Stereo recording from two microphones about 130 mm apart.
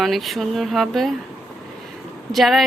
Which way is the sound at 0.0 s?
Centre (ahead or behind).